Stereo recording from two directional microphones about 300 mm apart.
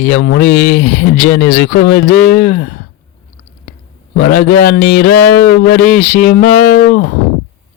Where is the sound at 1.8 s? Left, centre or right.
Left.